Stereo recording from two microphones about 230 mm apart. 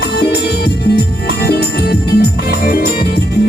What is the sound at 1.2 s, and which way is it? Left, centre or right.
Music, left.